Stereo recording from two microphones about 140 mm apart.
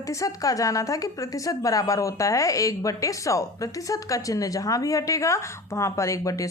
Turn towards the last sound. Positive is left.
turn(degrees=25)  # may be behind; listen again after turning